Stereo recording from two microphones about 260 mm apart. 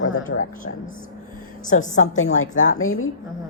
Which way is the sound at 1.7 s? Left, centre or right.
Left.